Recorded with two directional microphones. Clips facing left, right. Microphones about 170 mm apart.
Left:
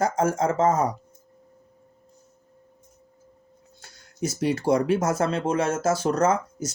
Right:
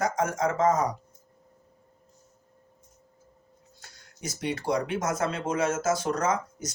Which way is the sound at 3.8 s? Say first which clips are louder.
Left 10 dB; 30° left (ahead or behind).